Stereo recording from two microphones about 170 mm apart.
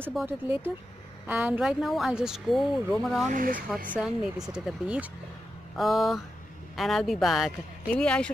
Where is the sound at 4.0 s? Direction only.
5° right (ahead or behind).